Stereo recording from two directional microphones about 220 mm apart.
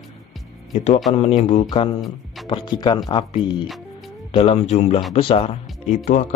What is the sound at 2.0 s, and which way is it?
Music, centre (ahead or behind).